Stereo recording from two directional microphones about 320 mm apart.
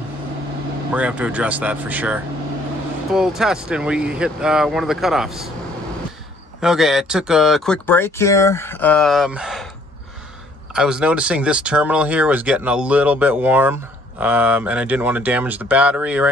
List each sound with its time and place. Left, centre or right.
0.9 s speech: centre
6.6 s speech: centre
10.7 s speech: centre